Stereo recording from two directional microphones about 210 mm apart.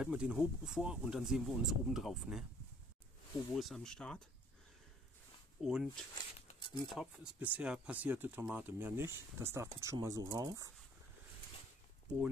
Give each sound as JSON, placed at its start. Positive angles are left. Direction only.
{"t": 0.0, "sound": "speech", "side_deg": -5}
{"t": 3.5, "sound": "speech", "side_deg": 0}
{"t": 5.6, "sound": "speech", "side_deg": -5}
{"t": 6.4, "sound": "a sound", "side_deg": 20}
{"t": 6.9, "sound": "speech", "side_deg": -5}